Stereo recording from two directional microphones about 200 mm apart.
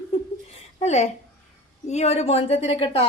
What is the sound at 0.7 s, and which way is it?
A woman's voice, 35° left (ahead or behind).